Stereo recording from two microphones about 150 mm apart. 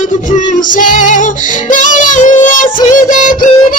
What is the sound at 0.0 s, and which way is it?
Child singing, 60° left (ahead or behind).